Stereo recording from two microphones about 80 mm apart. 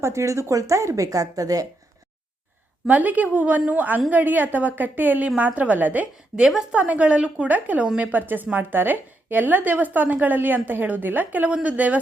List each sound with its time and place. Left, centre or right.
0.0 s speech: right
2.8 s a woman's voice: centre